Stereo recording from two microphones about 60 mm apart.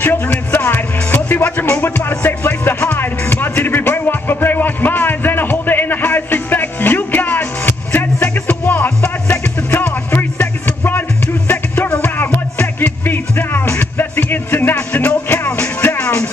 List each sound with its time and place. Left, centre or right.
0.0 s a sound: left
0.6 s music: left
2.7 s music: left
3.0 s music: left
14.9 s music: left